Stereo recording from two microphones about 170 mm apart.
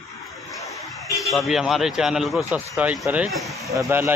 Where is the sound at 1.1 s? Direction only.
20° left (ahead or behind).